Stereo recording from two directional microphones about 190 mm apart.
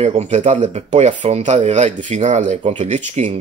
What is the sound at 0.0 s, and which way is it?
Speech, 35° right (ahead or behind).